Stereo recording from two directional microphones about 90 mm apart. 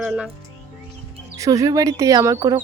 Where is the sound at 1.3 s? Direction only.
40° right (ahead or behind).